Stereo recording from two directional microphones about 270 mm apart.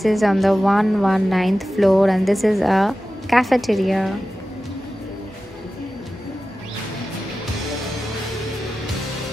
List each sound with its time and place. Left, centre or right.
0.0 s a woman's voice: centre